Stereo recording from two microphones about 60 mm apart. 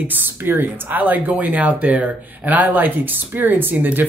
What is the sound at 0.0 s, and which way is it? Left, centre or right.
Speech, right.